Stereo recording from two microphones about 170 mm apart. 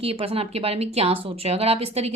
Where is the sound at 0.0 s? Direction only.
35° right (ahead or behind).